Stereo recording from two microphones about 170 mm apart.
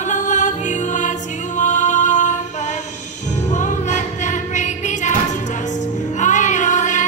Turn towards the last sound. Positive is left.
turn(degrees=45)  # may be behind; listen again after turning